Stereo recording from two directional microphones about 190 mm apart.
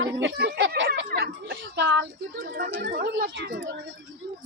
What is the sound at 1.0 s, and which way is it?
A child's voice, 60° right (ahead or behind).